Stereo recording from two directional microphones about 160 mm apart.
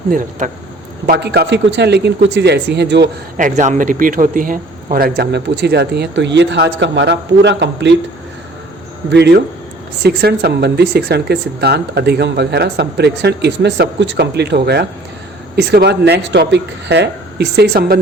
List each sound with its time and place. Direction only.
0.1 s speech: 55° right (ahead or behind)
1.0 s speech: 90° right
3.3 s speech: 50° right (ahead or behind); by 7.9 s 90° right
9.0 s speech: 90° right; by 18.0 s 65° right (ahead or behind)